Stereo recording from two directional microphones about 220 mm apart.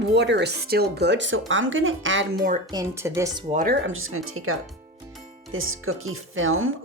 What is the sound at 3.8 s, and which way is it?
Speech, 70° right (ahead or behind).